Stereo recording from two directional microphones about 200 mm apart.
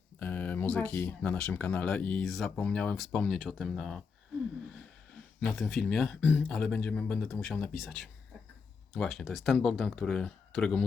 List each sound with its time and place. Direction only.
0.2 s speech: 10° left (ahead or behind)
5.4 s speech: centre (ahead or behind)